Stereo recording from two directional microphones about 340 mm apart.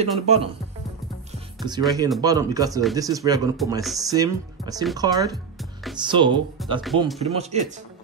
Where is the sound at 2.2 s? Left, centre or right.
Centre.